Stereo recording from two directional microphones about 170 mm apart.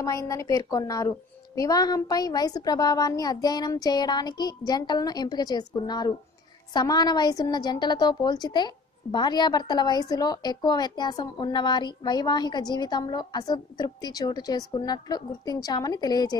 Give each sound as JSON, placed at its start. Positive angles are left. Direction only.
{"t": 0.0, "sound": "a woman's voice", "side_deg": 20}